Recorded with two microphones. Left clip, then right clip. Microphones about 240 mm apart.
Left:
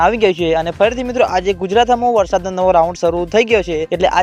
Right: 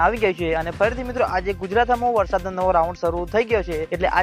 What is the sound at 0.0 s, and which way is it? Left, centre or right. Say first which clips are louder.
Speech: left 6 dB; left.